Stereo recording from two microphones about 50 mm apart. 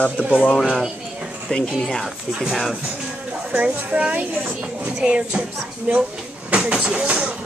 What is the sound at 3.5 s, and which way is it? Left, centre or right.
A woman's voice, right.